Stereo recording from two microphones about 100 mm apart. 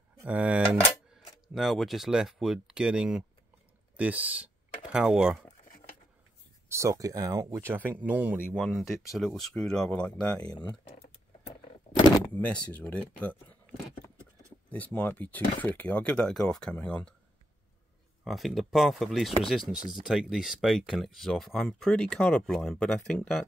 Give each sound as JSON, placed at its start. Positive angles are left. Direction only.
{"t": 0.2, "sound": "speech", "side_deg": -15}
{"t": 6.7, "sound": "speech", "side_deg": -35}
{"t": 7.5, "sound": "speech", "side_deg": -20}
{"t": 8.5, "sound": "speech", "side_deg": 0}
{"t": 12.3, "sound": "speech", "side_deg": 15}
{"t": 14.7, "sound": "speech", "side_deg": 15}
{"t": 18.2, "sound": "speech", "side_deg": 0}